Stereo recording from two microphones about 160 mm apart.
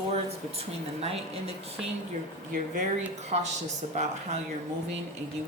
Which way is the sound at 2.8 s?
45° right (ahead or behind).